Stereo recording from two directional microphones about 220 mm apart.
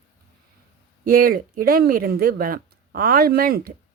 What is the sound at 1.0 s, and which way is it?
Speech, 40° right (ahead or behind).